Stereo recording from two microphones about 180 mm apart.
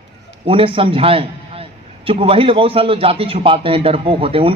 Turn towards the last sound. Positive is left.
turn(degrees=-30)  # may be behind; listen again after turning